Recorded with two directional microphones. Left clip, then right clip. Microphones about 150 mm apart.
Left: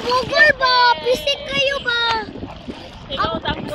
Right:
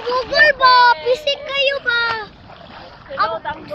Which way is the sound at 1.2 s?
45° left (ahead or behind).